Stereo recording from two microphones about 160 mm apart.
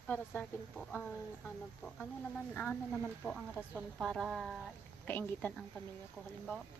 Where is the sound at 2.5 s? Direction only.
10° left (ahead or behind).